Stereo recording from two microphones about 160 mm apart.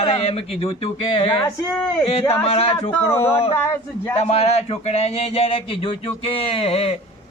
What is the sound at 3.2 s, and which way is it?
Speech, 35° left (ahead or behind).